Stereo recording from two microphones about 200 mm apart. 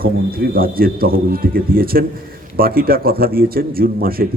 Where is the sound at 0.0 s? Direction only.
50° right (ahead or behind).